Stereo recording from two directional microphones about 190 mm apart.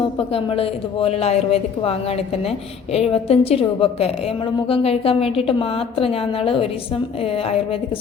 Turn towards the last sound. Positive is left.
turn(degrees=30)  # may be behind; listen again after turning